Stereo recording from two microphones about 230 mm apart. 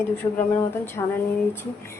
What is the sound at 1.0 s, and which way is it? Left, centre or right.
Speech, centre.